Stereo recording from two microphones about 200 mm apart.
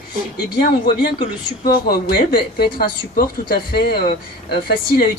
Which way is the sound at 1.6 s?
50° left (ahead or behind).